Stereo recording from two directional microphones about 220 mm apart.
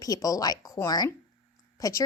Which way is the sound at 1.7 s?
15° left (ahead or behind).